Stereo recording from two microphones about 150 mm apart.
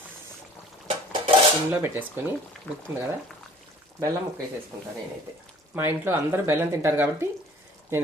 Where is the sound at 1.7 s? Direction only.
15° right (ahead or behind).